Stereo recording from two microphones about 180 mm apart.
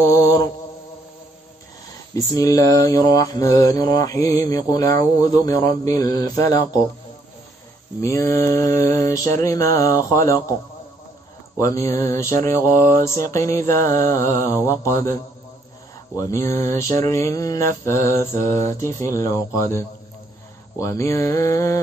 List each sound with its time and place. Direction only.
0.0 s mantra: 20° left (ahead or behind)
2.1 s mantra: 20° left (ahead or behind)
8.0 s mantra: 15° left (ahead or behind)
11.5 s mantra: 20° left (ahead or behind)
16.2 s mantra: 20° left (ahead or behind)